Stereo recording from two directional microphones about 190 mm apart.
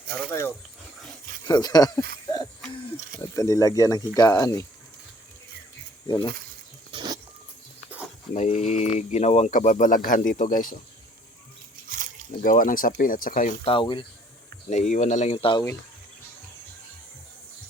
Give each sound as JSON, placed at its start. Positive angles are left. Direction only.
{"t": 0.1, "sound": "speech", "side_deg": 15}
{"t": 3.2, "sound": "speech", "side_deg": 15}
{"t": 6.9, "sound": "vehicle", "side_deg": -25}
{"t": 8.3, "sound": "speech", "side_deg": 35}
{"t": 11.9, "sound": "a sound", "side_deg": -45}
{"t": 12.4, "sound": "speech", "side_deg": 45}
{"t": 13.7, "sound": "speech", "side_deg": 25}
{"t": 14.7, "sound": "speech", "side_deg": 40}